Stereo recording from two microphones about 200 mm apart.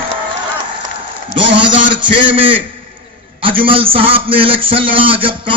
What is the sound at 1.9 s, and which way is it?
A man's voice, 25° right (ahead or behind).